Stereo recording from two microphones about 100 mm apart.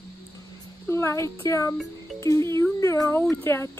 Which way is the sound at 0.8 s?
25° left (ahead or behind).